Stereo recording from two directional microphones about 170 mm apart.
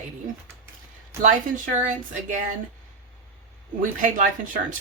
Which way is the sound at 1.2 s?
50° right (ahead or behind).